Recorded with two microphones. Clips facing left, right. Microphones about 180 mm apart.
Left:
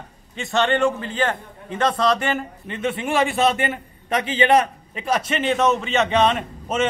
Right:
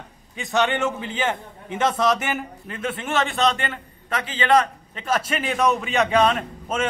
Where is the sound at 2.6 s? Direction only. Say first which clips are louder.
Left 4 dB; centre (ahead or behind).